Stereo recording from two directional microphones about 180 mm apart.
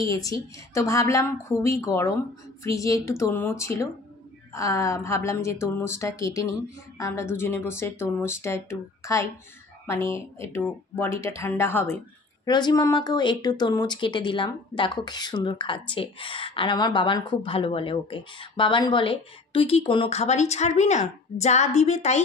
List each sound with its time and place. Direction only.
0.0 s speech: 20° left (ahead or behind)
12.4 s a woman's voice: 25° left (ahead or behind); by 22.2 s 40° left (ahead or behind)